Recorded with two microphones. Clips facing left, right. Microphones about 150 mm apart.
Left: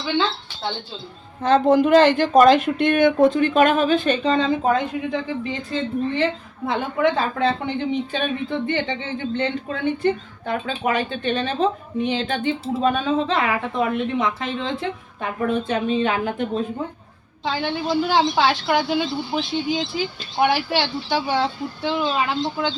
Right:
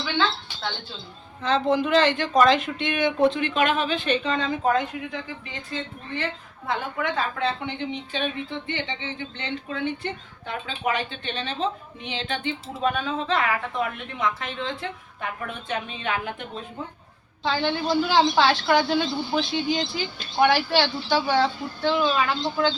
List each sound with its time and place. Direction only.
0.0 s a woman's voice: 20° left (ahead or behind)
1.4 s a woman's voice: 50° left (ahead or behind)
17.5 s speech: 10° left (ahead or behind)